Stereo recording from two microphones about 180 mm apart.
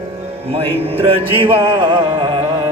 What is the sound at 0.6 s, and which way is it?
A man's voice, 30° right (ahead or behind).